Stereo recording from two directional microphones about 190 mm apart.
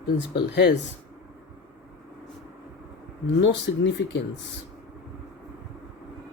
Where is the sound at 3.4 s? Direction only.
70° left (ahead or behind).